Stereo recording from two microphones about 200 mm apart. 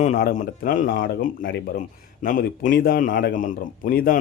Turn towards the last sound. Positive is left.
turn(degrees=40)  # may be behind; listen again after turning